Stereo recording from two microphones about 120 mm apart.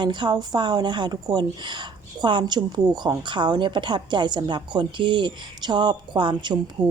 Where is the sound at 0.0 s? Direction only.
40° right (ahead or behind).